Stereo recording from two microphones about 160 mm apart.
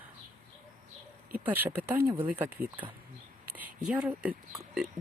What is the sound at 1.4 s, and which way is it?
Speech, 10° right (ahead or behind).